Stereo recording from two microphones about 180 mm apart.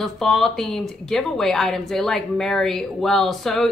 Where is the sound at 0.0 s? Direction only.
Centre (ahead or behind).